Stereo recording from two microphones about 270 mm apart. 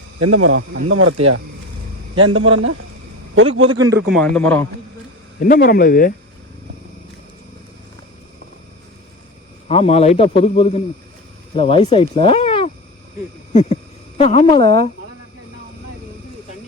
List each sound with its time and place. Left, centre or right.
0.2 s a man's voice: right
4.1 s a man's voice: centre
5.4 s speech: left
9.6 s speech: left
13.5 s a sound: left
14.2 s speech: left